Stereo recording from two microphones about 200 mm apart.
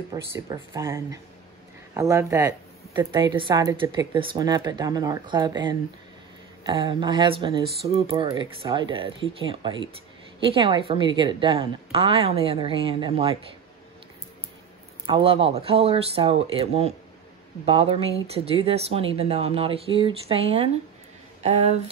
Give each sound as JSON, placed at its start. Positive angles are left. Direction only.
{"t": 0.1, "sound": "speech", "side_deg": -15}
{"t": 15.0, "sound": "speech", "side_deg": -25}